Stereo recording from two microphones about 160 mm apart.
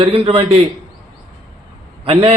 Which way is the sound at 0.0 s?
35° right (ahead or behind).